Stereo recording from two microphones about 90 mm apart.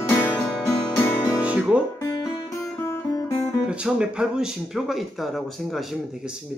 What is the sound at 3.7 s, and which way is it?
Speech, 10° right (ahead or behind).